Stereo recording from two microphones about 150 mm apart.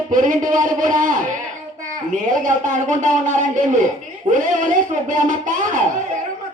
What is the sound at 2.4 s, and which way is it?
A man's voice, 55° right (ahead or behind).